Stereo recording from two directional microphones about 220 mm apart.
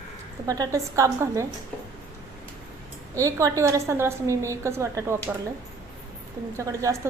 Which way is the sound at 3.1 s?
15° right (ahead or behind).